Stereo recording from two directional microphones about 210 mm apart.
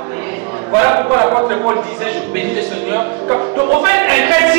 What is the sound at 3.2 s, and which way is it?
Speech, 15° right (ahead or behind).